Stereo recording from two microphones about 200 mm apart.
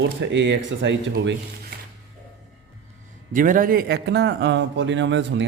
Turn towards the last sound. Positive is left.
turn(degrees=-65)  # may be behind; listen again after turning